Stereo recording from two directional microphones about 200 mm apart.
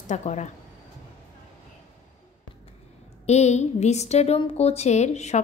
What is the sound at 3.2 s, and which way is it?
A woman's voice, 35° left (ahead or behind).